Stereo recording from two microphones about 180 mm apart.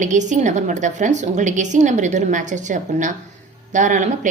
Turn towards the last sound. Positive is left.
turn(degrees=-45)  # may be behind; listen again after turning